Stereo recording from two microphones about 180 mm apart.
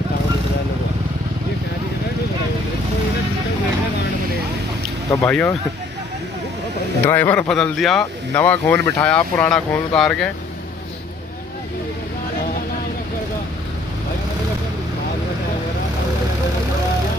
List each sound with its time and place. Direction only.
5.1 s speech: 10° left (ahead or behind)
7.1 s speech: 10° left (ahead or behind)